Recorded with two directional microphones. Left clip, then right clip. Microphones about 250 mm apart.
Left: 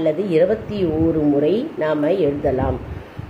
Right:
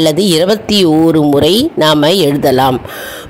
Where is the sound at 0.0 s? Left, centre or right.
Right.